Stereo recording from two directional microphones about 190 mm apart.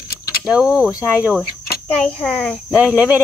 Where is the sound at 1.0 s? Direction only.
10° right (ahead or behind).